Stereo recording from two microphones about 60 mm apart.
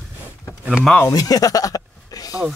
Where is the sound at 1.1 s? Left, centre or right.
Left.